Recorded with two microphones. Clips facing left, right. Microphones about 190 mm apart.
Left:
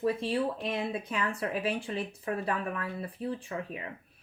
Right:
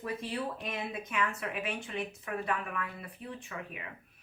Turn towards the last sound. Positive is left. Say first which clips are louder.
# left 6 dB
turn(degrees=30)  # may be behind; listen again after turning